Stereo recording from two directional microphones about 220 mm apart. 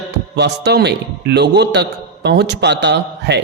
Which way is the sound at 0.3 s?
50° right (ahead or behind).